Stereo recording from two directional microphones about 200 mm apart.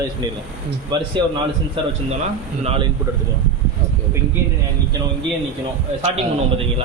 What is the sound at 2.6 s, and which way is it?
Speech, 30° right (ahead or behind).